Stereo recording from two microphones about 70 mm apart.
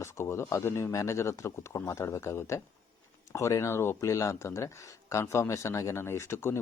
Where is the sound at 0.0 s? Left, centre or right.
Left.